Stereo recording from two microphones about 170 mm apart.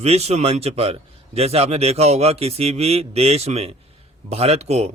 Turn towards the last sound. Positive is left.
turn(degrees=-40)  # may be behind; listen again after turning